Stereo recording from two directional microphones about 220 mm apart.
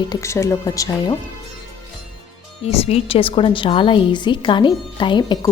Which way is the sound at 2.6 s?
25° left (ahead or behind).